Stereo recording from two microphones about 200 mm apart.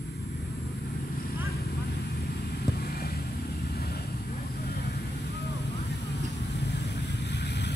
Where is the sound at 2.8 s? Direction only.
50° left (ahead or behind).